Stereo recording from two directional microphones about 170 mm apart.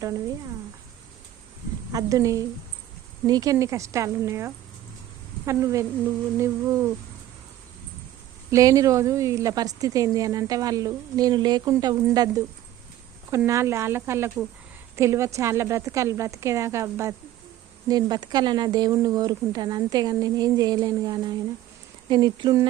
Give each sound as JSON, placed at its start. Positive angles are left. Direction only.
{"t": 1.9, "sound": "a woman's voice", "side_deg": -20}
{"t": 8.4, "sound": "a woman's voice", "side_deg": -20}
{"t": 13.3, "sound": "a woman's voice", "side_deg": -15}